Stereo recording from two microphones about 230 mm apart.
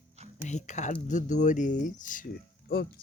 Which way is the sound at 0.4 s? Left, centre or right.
Left.